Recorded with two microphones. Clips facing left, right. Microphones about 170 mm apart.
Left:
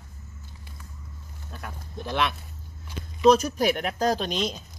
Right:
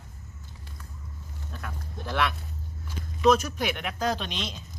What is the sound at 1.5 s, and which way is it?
Speech, 20° left (ahead or behind).